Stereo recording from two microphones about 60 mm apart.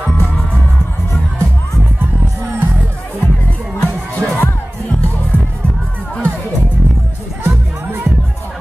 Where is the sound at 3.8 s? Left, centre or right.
Centre.